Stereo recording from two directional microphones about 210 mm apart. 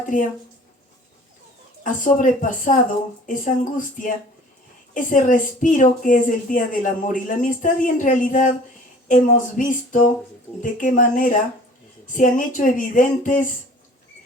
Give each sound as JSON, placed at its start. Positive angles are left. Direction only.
{"t": 0.0, "sound": "speech", "side_deg": 40}
{"t": 1.8, "sound": "speech", "side_deg": 40}
{"t": 5.1, "sound": "speech", "side_deg": 40}